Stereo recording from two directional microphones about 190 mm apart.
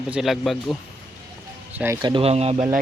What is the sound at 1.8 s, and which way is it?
Speech, 20° right (ahead or behind).